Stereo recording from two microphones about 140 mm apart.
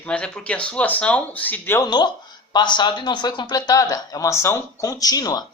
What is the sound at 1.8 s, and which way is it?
Speech, 30° left (ahead or behind).